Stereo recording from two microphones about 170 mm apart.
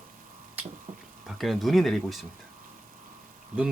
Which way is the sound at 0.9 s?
50° right (ahead or behind).